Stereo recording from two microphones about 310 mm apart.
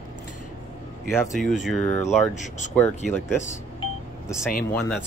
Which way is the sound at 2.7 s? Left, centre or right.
Centre.